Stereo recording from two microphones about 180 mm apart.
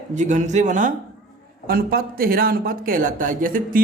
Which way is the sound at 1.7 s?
55° right (ahead or behind).